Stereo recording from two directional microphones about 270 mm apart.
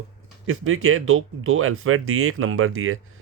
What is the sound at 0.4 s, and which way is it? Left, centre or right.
Speech, right.